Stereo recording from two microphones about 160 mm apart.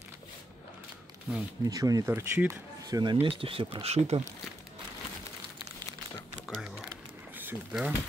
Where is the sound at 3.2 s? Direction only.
35° right (ahead or behind).